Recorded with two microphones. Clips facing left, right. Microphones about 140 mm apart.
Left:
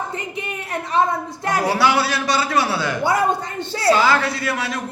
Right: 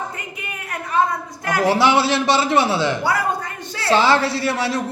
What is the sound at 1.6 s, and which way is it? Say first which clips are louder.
A man's voice: right 3 dB; 25° right (ahead or behind).